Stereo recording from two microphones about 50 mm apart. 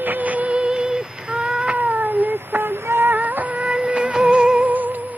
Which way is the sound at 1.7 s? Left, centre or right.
Right.